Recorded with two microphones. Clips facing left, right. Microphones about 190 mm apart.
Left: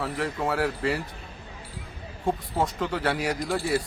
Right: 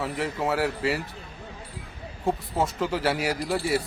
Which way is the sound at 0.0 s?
Centre (ahead or behind).